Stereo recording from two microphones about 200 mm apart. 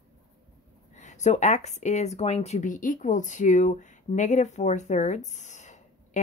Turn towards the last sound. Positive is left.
turn(degrees=35)  # may be behind; listen again after turning